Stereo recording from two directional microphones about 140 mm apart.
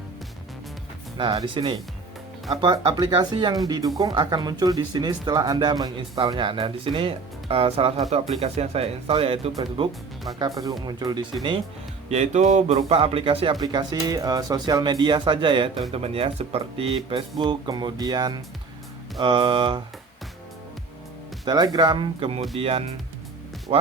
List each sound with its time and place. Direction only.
1.1 s speech: 40° right (ahead or behind)
10.3 s speech: 30° right (ahead or behind)
12.0 s speech: 55° right (ahead or behind)
13.6 s speech: 30° right (ahead or behind)
21.4 s speech: 30° right (ahead or behind)